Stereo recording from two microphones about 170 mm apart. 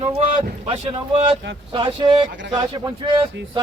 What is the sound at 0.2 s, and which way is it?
Speech, 30° right (ahead or behind).